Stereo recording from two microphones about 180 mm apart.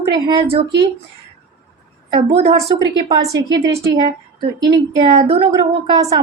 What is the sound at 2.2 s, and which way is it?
Speech, 35° right (ahead or behind).